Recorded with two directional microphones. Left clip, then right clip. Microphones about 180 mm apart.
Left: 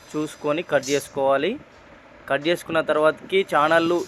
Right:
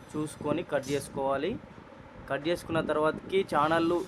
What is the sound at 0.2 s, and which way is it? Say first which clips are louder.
Speech: left 7 dB; 15° left (ahead or behind).